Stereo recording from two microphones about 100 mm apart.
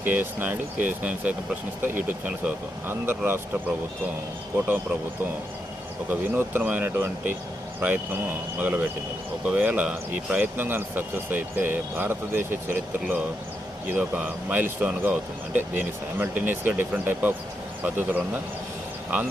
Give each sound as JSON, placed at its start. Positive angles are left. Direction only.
{"t": 0.0, "sound": "speech", "side_deg": -20}
{"t": 6.1, "sound": "speech", "side_deg": -20}